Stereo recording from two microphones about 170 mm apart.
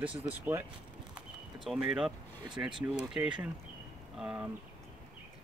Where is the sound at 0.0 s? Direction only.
10° right (ahead or behind).